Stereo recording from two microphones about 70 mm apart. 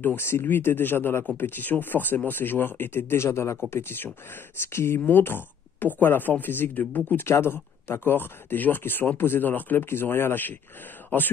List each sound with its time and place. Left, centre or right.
0.0 s speech: left
3.7 s speech: left